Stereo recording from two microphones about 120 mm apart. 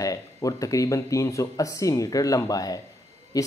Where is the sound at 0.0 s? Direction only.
30° left (ahead or behind).